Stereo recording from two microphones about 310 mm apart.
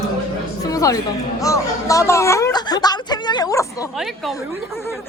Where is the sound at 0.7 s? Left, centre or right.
Centre.